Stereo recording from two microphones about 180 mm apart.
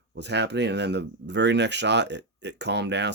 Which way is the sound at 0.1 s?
70° right (ahead or behind).